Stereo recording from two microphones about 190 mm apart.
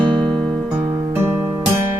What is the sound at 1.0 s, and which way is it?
Music, 15° right (ahead or behind).